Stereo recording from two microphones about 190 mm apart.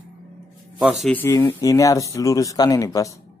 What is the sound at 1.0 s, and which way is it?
Speech, 10° left (ahead or behind).